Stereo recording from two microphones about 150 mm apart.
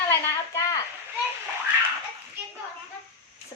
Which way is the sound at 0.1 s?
20° left (ahead or behind).